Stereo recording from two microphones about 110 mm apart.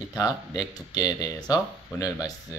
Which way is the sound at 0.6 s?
40° left (ahead or behind).